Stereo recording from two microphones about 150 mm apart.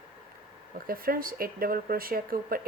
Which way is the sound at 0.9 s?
75° right (ahead or behind).